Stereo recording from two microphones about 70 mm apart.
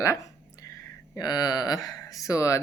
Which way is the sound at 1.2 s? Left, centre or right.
Left.